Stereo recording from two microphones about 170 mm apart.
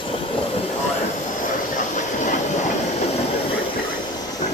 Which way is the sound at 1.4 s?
45° left (ahead or behind).